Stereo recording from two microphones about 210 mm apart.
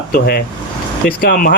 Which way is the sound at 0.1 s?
50° left (ahead or behind).